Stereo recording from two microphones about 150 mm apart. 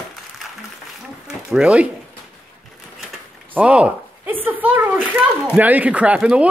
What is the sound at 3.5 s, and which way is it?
Speech, 10° right (ahead or behind).